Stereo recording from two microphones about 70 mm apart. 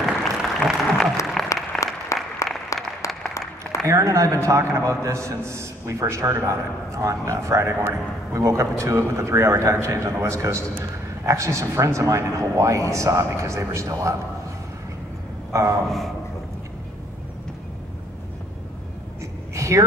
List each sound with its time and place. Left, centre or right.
0.0 s applause: centre
2.1 s applause: left
3.8 s a man's voice: right
15.5 s a man's voice: right
19.5 s a sound: right